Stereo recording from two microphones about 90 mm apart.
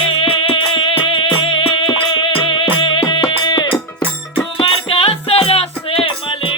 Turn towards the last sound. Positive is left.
turn(degrees=90)